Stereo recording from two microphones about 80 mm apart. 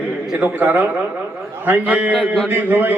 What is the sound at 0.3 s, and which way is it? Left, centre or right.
A man's voice, right.